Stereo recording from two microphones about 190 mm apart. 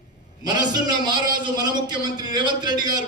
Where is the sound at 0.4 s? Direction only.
20° right (ahead or behind).